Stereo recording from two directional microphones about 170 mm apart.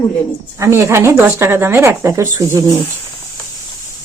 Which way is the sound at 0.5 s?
15° right (ahead or behind).